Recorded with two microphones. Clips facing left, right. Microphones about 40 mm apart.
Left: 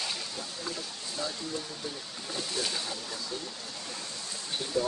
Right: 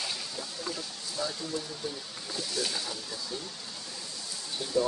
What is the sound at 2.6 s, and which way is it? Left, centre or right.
Speech, left.